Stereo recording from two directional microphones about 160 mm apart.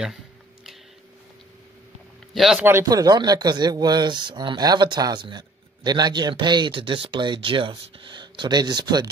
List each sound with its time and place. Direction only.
2.3 s speech: centre (ahead or behind)
2.6 s speech: 20° right (ahead or behind)